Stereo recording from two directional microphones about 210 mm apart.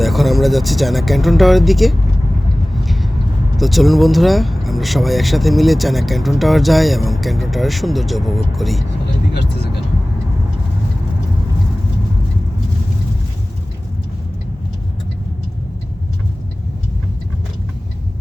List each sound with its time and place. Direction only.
0.0 s speech: centre (ahead or behind)
2.7 s vehicle: centre (ahead or behind)
3.6 s speech: centre (ahead or behind)